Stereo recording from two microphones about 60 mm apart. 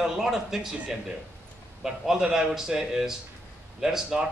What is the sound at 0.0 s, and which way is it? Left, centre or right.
Speech, centre.